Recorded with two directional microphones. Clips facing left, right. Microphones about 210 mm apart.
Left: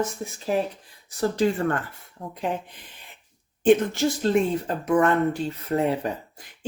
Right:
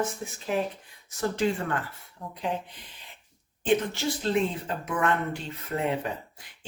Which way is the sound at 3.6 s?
45° left (ahead or behind).